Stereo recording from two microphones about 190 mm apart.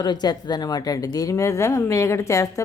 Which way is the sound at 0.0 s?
20° left (ahead or behind).